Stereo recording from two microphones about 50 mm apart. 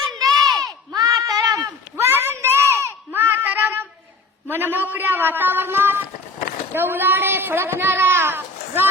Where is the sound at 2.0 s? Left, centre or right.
Right.